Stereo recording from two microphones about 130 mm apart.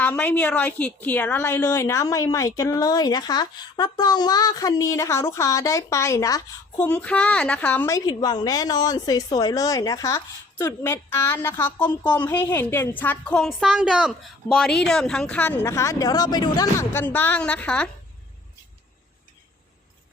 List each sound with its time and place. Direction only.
0.0 s a woman's voice: 15° left (ahead or behind)
6.7 s a woman's voice: 10° left (ahead or behind)
7.9 s a woman's voice: 30° left (ahead or behind)
16.9 s a woman's voice: 15° left (ahead or behind)